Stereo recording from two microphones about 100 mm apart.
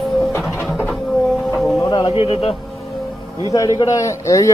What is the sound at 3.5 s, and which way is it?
A man's voice, 35° left (ahead or behind).